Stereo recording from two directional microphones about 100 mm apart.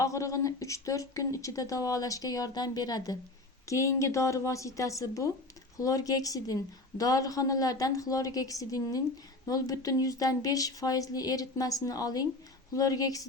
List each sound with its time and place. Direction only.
0.0 s a woman's voice: 30° left (ahead or behind)
3.7 s a woman's voice: 30° left (ahead or behind)